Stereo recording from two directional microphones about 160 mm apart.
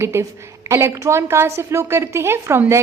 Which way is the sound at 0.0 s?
15° right (ahead or behind).